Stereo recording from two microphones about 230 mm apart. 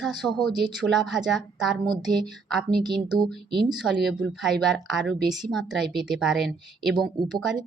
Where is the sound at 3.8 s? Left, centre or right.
Centre.